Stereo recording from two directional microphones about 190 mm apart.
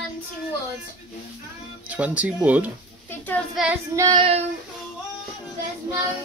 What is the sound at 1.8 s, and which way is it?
Speech, 5° right (ahead or behind).